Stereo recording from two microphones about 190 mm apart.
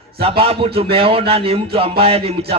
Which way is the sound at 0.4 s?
30° right (ahead or behind).